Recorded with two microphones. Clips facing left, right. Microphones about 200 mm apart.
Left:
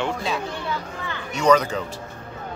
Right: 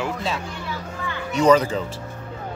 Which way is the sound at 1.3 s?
30° right (ahead or behind).